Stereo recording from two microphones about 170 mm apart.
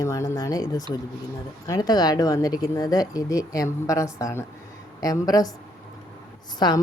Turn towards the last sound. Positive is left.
turn(degrees=25)  # may be behind; listen again after turning